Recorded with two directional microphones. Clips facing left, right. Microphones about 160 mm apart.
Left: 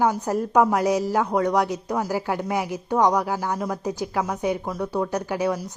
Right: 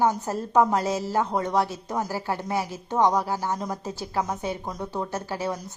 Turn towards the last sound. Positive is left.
turn(degrees=15)  # may be behind; listen again after turning